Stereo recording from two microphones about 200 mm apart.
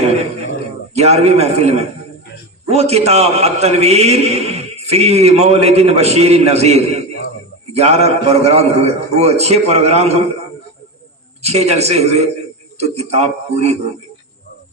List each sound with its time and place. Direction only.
0.9 s a man's voice: 30° right (ahead or behind)
11.4 s a man's voice: 30° right (ahead or behind)